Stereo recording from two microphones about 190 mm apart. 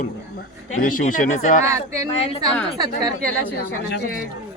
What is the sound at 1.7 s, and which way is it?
Speech, 15° right (ahead or behind).